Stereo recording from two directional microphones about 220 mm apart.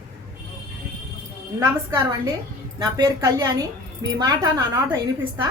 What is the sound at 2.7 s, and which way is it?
A woman's voice, 15° right (ahead or behind).